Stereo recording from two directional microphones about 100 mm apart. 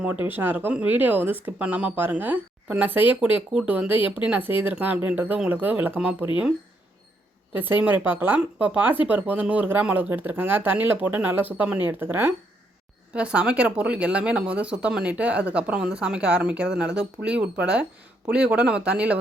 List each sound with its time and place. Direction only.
0.0 s speech: 20° right (ahead or behind)
7.5 s speech: 20° right (ahead or behind)